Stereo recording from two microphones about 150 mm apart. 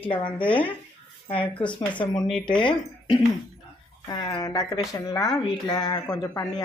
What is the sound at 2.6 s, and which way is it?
Speech, 30° left (ahead or behind).